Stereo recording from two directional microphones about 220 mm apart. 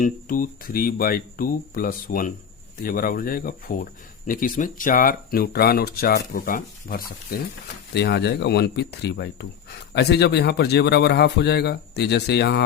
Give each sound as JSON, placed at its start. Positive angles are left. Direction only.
{"t": 0.0, "sound": "speech", "side_deg": 40}